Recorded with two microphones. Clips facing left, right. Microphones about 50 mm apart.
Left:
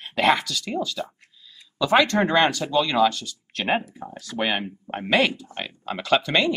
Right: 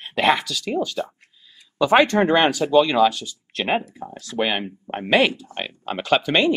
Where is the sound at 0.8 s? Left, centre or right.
Right.